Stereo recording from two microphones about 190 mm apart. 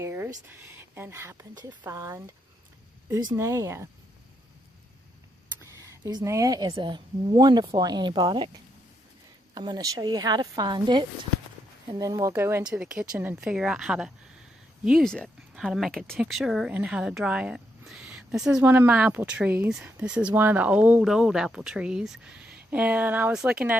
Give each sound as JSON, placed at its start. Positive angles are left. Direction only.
{"t": 0.0, "sound": "a sound", "side_deg": -15}
{"t": 0.8, "sound": "speech", "side_deg": -10}
{"t": 5.8, "sound": "speech", "side_deg": -20}
{"t": 9.6, "sound": "speech", "side_deg": -20}